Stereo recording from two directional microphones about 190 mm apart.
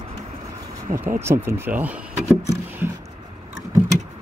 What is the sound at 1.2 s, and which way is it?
Speech, 15° right (ahead or behind).